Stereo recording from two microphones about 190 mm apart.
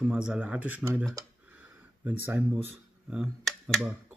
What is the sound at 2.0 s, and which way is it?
Speech, 10° right (ahead or behind).